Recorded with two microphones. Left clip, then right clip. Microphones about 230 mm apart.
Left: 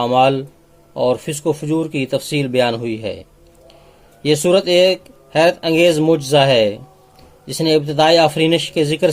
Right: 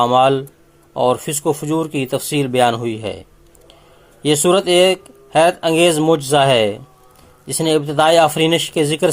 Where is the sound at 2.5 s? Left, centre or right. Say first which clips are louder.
Right 2 dB; right.